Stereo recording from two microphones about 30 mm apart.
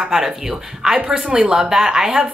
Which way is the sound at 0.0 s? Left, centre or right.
Centre.